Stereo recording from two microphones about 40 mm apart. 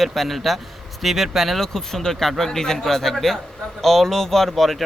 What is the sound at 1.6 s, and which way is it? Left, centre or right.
Speech, centre.